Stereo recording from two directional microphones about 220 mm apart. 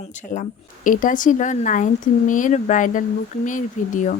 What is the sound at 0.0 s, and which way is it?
Speech, 35° left (ahead or behind).